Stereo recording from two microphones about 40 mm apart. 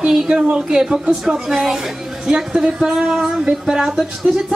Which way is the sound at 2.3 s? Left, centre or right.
Centre.